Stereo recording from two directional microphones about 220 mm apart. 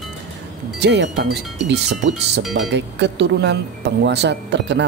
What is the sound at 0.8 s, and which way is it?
Speech, 50° right (ahead or behind).